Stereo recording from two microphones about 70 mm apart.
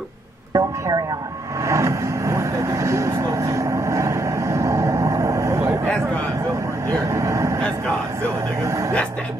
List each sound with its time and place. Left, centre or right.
0.6 s speech: right
1.7 s vehicle: right
7.1 s speech: right
8.6 s speech: right